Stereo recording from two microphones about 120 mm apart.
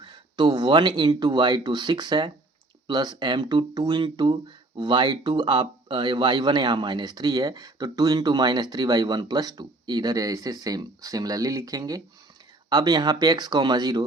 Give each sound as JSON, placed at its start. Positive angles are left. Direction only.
{"t": 0.0, "sound": "speech", "side_deg": -40}